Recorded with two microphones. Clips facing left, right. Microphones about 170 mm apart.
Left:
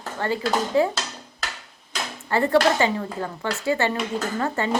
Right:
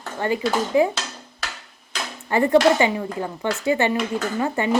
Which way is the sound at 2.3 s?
15° right (ahead or behind).